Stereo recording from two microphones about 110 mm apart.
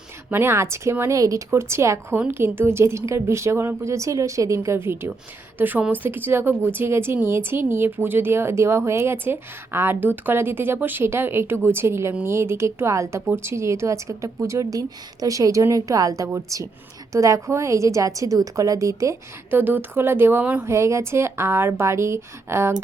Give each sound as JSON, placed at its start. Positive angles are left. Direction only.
{"t": 0.3, "sound": "a woman's voice", "side_deg": -20}